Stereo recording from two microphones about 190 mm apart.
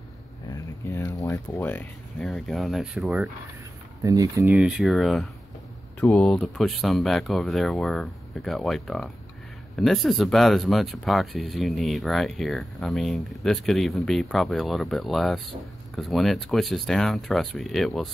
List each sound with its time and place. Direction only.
0.5 s speech: 15° left (ahead or behind); by 3.3 s centre (ahead or behind)
4.0 s speech: 15° right (ahead or behind)
4.5 s speech: 5° right (ahead or behind)